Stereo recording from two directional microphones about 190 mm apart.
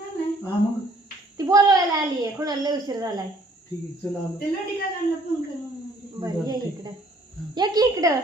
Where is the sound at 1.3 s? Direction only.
20° right (ahead or behind).